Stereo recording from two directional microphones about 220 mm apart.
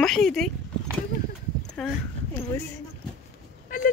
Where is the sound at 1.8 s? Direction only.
5° left (ahead or behind).